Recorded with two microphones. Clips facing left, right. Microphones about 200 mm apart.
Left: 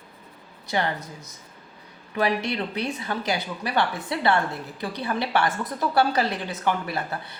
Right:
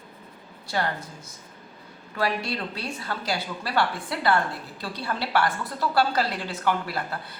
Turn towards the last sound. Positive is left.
turn(degrees=20)  # may be behind; listen again after turning